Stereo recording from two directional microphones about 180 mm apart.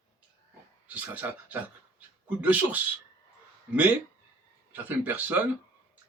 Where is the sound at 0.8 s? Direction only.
10° right (ahead or behind).